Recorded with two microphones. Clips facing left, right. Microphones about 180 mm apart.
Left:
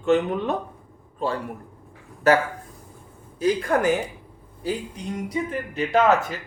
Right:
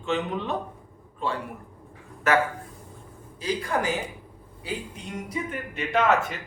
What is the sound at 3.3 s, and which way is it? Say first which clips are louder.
Speech: left 6 dB; 50° left (ahead or behind).